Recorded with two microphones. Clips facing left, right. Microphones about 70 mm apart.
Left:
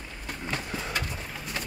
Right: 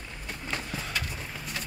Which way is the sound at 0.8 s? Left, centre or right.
Left.